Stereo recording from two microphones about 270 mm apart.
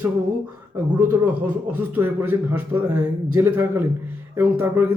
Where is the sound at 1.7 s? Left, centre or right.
Centre.